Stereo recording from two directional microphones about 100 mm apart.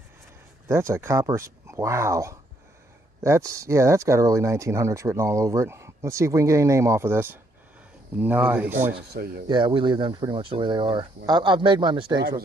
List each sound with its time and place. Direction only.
0.7 s speech: 30° right (ahead or behind)
9.5 s speech: 50° right (ahead or behind)
10.3 s speech: 60° right (ahead or behind)